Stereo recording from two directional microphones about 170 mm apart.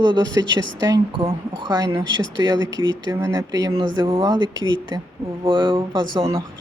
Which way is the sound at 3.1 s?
15° right (ahead or behind).